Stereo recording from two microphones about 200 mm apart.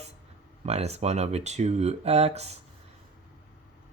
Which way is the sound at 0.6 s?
30° right (ahead or behind).